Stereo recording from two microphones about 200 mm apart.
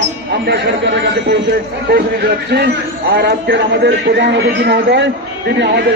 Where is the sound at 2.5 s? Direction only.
55° right (ahead or behind).